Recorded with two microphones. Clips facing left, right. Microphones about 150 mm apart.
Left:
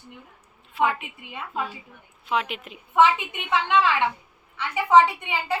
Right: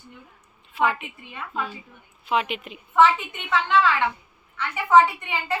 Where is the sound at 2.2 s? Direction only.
Centre (ahead or behind).